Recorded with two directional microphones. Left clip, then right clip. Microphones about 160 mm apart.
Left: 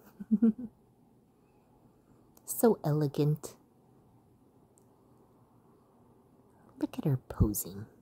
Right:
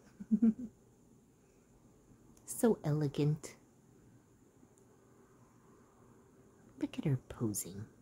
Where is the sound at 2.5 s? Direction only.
25° left (ahead or behind).